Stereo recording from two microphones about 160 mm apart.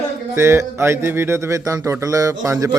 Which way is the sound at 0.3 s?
15° right (ahead or behind).